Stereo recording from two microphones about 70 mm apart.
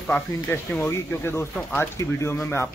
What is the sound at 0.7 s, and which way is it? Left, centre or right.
Speech, left.